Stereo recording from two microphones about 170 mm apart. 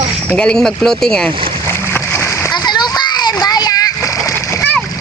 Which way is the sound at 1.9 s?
15° left (ahead or behind).